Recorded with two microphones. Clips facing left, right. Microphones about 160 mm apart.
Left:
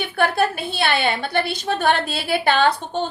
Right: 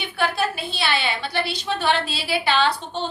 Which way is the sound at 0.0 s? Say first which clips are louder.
Left 4 dB; 50° left (ahead or behind).